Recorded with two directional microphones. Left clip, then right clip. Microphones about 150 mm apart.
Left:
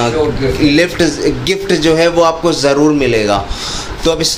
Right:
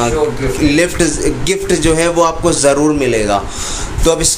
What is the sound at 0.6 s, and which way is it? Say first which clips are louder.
Speech: left 1 dB; 5° left (ahead or behind).